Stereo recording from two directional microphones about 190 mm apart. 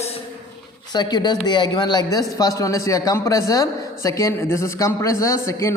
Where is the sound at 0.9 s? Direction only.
20° left (ahead or behind).